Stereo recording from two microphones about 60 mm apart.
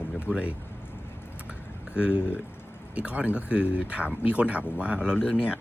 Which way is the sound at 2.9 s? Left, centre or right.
Centre.